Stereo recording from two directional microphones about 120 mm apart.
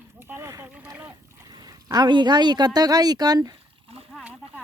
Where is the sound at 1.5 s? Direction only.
35° right (ahead or behind).